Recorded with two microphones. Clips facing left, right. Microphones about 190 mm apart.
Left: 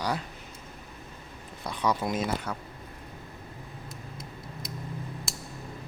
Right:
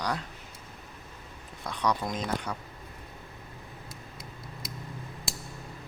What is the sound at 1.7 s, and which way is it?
Speech, 5° left (ahead or behind).